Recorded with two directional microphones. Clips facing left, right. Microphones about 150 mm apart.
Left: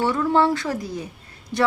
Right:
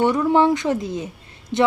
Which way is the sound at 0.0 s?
20° right (ahead or behind).